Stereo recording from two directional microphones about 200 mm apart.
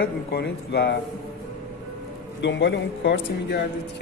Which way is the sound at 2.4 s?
60° left (ahead or behind).